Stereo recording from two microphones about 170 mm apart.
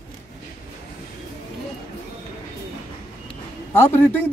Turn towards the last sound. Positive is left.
turn(degrees=10)  # may be behind; listen again after turning